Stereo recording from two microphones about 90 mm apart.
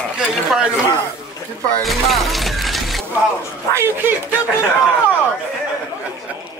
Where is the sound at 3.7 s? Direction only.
30° right (ahead or behind).